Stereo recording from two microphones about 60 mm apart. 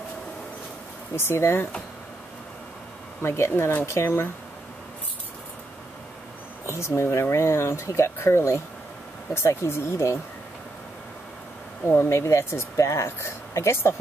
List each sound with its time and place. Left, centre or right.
1.1 s speech: left
3.2 s speech: left
6.6 s speech: left
11.9 s speech: left